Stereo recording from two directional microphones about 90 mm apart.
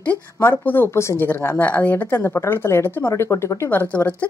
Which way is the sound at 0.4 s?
25° left (ahead or behind).